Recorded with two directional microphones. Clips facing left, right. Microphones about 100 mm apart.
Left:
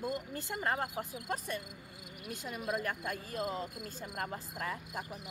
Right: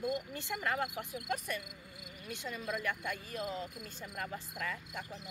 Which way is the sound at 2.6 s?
40° left (ahead or behind).